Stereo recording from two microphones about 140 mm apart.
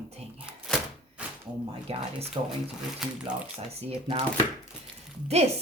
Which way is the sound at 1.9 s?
45° right (ahead or behind).